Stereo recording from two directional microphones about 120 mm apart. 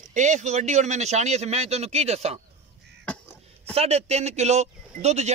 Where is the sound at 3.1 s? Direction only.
10° left (ahead or behind).